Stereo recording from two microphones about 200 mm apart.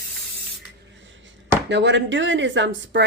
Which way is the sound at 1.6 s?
60° right (ahead or behind).